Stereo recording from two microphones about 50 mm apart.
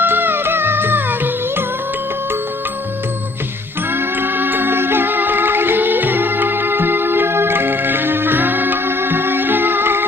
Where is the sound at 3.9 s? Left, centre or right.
Right.